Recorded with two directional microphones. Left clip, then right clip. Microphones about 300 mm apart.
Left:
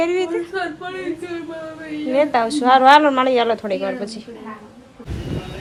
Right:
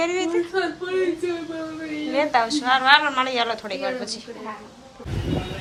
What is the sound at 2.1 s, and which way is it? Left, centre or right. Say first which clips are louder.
Speech: left 3 dB; centre.